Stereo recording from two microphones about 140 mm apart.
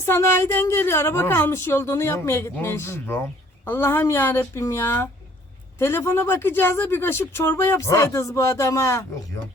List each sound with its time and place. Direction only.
0.1 s speech: 15° left (ahead or behind)